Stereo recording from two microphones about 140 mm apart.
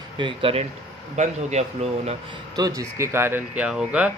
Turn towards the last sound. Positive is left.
turn(degrees=-5)  # may be behind; listen again after turning